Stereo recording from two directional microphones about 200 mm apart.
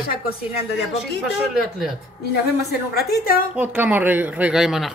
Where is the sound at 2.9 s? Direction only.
50° left (ahead or behind).